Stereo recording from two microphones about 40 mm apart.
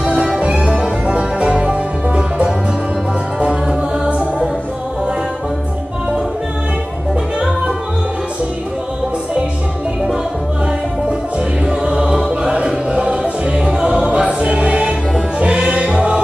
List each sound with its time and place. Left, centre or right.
0.0 s music: right
4.1 s music: right
11.6 s music: right